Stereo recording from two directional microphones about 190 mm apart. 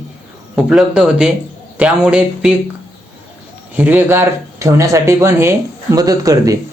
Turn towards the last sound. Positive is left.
turn(degrees=-20)  # may be behind; listen again after turning